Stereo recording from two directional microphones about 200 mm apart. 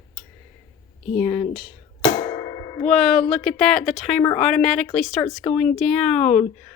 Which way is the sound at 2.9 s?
5° left (ahead or behind).